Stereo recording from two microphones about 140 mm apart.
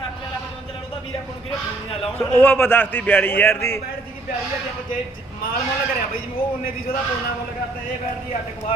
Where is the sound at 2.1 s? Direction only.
15° left (ahead or behind).